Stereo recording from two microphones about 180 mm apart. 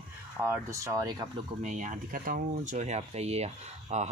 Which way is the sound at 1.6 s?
45° right (ahead or behind).